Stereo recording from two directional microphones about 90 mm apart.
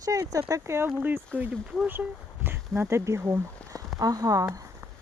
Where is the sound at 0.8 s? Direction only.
20° right (ahead or behind).